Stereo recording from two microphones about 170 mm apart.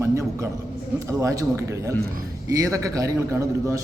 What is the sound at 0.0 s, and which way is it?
A man's voice, 15° right (ahead or behind).